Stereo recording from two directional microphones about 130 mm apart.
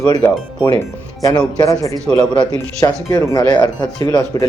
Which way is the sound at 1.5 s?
25° left (ahead or behind).